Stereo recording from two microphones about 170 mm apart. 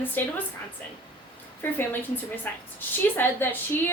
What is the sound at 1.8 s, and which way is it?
A woman's voice, 10° left (ahead or behind).